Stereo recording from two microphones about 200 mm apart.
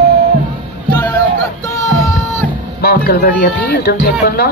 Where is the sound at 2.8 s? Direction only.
50° left (ahead or behind).